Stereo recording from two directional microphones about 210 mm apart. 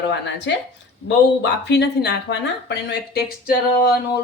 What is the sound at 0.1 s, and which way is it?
Speech, 55° left (ahead or behind).